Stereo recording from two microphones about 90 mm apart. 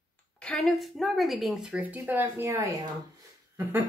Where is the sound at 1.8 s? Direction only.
20° right (ahead or behind); by 2.9 s 35° right (ahead or behind).